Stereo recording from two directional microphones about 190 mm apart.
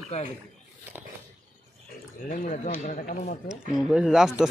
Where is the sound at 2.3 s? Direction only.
45° left (ahead or behind).